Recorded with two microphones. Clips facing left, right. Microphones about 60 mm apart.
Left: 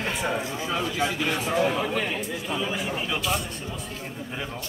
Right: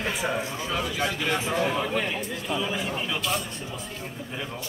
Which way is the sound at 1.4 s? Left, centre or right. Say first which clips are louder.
Left 2 dB; centre.